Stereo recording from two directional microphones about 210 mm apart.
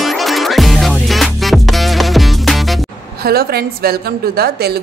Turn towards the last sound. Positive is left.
turn(degrees=-45)  # may be behind; listen again after turning